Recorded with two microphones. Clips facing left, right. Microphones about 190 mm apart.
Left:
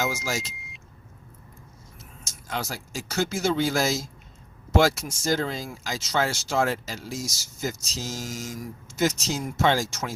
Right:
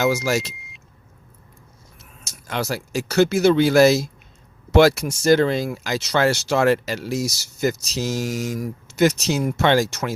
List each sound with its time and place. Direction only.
0.0 s speech: 65° right (ahead or behind)
0.5 s vehicle: centre (ahead or behind)
2.0 s speech: 70° right (ahead or behind)